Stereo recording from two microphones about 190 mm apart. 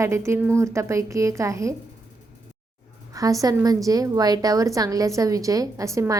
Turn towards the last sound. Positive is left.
turn(degrees=-15)  # may be behind; listen again after turning